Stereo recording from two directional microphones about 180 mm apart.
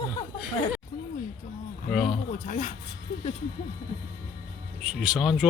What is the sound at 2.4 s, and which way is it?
Speech, 45° left (ahead or behind).